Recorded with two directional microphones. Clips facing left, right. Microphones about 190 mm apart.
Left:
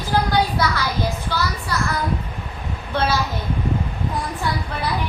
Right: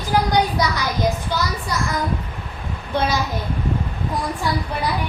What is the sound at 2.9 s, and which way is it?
Speech, 15° right (ahead or behind).